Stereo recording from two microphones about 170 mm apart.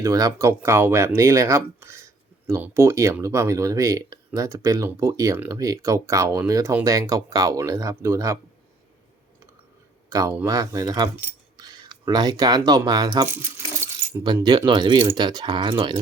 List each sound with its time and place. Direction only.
0.0 s speech: 20° right (ahead or behind)
10.1 s speech: 20° right (ahead or behind)